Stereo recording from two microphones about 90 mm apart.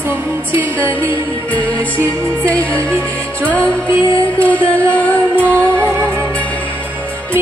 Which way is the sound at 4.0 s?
65° left (ahead or behind).